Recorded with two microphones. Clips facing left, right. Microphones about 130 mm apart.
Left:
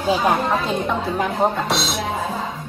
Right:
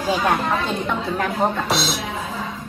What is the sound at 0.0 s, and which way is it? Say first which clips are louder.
Speech: left 2 dB; 10° left (ahead or behind).